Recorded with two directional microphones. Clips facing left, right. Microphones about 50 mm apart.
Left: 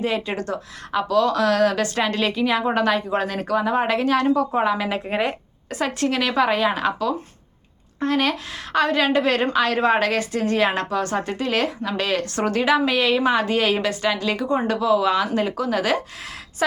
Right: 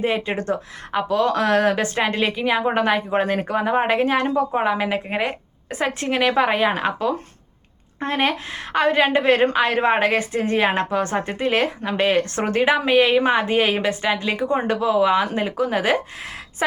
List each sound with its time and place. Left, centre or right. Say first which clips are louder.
0.0 s a woman's voice: right 2 dB; right; by 5.3 s centre
5.7 s a woman's voice: even; right